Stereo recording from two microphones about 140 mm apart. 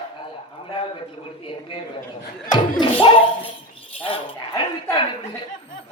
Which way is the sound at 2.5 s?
35° left (ahead or behind).